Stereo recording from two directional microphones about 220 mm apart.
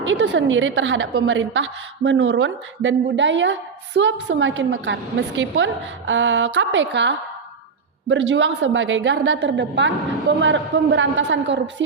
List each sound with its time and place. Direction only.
0.0 s a woman's voice: 55° right (ahead or behind)